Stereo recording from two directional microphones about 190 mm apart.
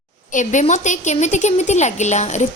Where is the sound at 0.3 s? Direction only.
40° left (ahead or behind).